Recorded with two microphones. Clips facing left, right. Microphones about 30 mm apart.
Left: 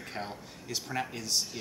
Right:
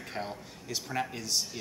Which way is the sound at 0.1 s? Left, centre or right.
Centre.